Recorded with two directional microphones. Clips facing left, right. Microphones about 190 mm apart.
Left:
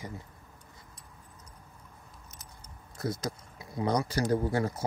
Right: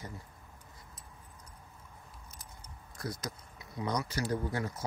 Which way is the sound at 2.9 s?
25° left (ahead or behind).